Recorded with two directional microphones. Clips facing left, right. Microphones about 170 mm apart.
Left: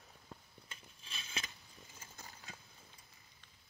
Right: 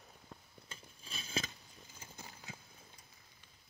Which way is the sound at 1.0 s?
40° right (ahead or behind).